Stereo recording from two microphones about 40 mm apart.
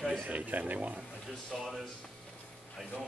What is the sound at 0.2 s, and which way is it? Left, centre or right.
Speech, right.